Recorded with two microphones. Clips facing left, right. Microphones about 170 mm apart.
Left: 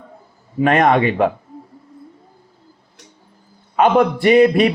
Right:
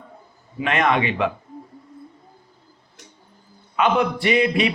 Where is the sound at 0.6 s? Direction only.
45° left (ahead or behind).